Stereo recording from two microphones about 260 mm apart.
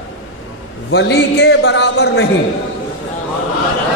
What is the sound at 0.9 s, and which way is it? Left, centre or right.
A man's voice, left.